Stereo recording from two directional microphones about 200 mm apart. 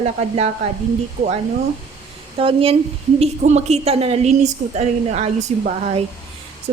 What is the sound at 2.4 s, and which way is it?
A woman's voice, 25° right (ahead or behind).